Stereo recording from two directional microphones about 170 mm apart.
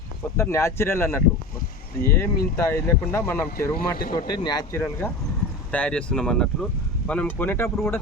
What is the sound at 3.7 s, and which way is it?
Speech, 60° left (ahead or behind).